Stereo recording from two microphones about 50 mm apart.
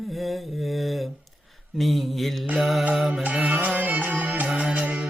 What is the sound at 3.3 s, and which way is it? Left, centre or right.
Music, right.